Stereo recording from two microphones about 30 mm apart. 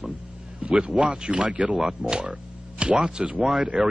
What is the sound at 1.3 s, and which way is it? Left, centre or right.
Speech, right.